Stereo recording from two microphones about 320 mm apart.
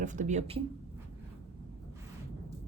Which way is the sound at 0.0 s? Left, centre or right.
Right.